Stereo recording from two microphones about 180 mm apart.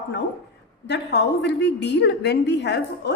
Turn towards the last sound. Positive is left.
turn(degrees=75)  # may be behind; listen again after turning